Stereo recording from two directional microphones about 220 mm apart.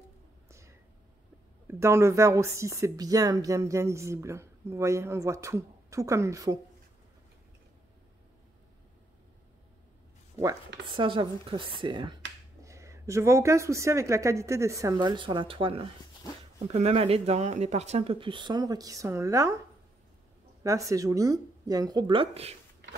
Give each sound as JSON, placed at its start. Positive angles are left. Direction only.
{"t": 0.5, "sound": "a sound", "side_deg": -15}
{"t": 1.7, "sound": "speech", "side_deg": -10}
{"t": 10.9, "sound": "speech", "side_deg": -20}
{"t": 20.6, "sound": "speech", "side_deg": -15}